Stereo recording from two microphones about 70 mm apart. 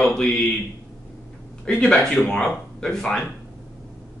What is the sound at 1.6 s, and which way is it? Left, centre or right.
Speech, centre.